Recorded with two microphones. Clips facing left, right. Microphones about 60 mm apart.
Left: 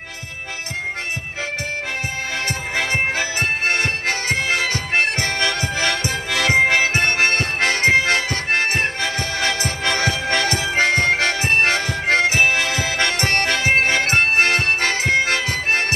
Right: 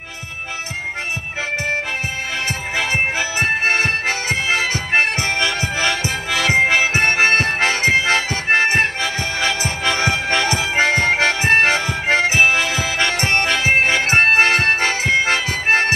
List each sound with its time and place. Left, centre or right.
3.6 s music: right
6.5 s harmonica: centre
7.0 s harmonica: right
9.6 s music: centre